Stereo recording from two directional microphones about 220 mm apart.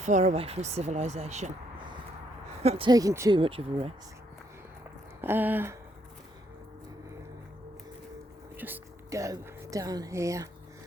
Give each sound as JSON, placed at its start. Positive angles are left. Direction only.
{"t": 0.0, "sound": "speech", "side_deg": -35}
{"t": 5.2, "sound": "a sound", "side_deg": -10}
{"t": 8.5, "sound": "a woman's voice", "side_deg": -10}